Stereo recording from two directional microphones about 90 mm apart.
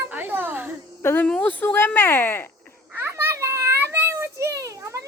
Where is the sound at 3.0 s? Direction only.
30° right (ahead or behind).